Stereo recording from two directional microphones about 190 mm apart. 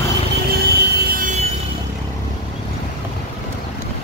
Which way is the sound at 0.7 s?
60° right (ahead or behind).